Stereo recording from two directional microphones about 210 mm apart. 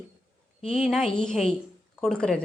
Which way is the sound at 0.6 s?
30° left (ahead or behind).